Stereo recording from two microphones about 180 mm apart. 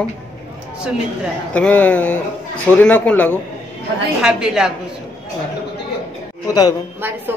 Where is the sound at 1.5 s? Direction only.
5° left (ahead or behind).